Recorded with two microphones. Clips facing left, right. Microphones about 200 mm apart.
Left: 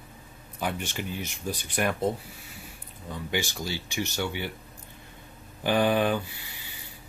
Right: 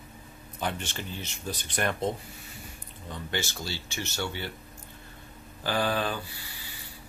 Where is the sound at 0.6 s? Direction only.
10° left (ahead or behind).